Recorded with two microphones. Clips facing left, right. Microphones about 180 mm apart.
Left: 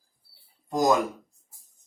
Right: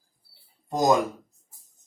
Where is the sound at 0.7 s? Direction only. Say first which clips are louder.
Even; 20° right (ahead or behind).